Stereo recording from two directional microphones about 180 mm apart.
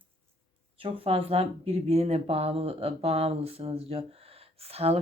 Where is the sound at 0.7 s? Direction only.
30° right (ahead or behind).